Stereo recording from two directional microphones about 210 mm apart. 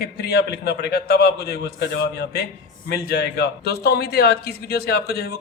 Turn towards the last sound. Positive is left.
turn(degrees=50)  # may be behind; listen again after turning